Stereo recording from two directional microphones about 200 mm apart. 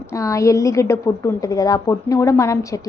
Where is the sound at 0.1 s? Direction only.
15° left (ahead or behind).